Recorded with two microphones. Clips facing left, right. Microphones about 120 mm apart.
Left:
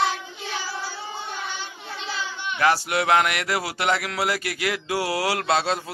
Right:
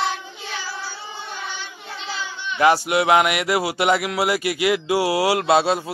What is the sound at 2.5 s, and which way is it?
Speech, 20° right (ahead or behind).